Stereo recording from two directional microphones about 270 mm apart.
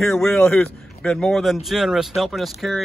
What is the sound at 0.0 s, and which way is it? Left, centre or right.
Speech, centre.